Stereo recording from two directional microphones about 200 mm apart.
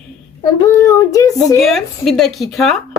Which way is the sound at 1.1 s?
15° left (ahead or behind).